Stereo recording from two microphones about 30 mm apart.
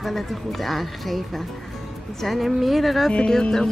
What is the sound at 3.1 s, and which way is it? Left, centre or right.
Speech, left.